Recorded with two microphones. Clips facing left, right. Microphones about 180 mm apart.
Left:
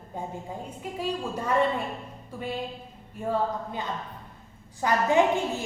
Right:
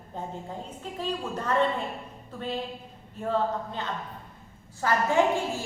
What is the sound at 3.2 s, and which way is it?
A woman's voice, 10° left (ahead or behind).